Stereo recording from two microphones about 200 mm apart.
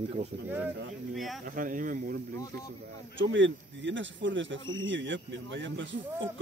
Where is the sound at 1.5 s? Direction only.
45° right (ahead or behind).